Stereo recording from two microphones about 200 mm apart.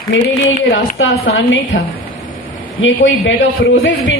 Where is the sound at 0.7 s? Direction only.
70° left (ahead or behind).